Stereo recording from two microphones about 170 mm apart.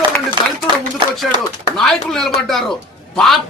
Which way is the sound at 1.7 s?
5° left (ahead or behind).